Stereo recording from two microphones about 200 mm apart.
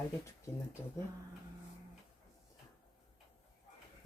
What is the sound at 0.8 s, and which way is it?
Speech, 10° left (ahead or behind).